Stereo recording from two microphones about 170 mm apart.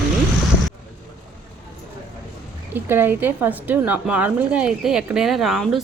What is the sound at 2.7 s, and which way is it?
A woman's voice, 10° right (ahead or behind).